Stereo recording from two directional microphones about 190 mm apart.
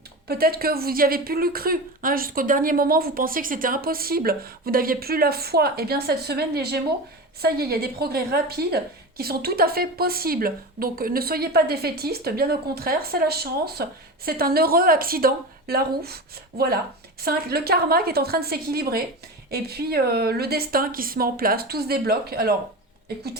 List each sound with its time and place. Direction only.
0.3 s a woman's voice: 55° right (ahead or behind)